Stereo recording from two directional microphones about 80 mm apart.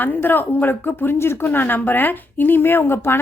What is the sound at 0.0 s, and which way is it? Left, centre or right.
A woman's voice, left.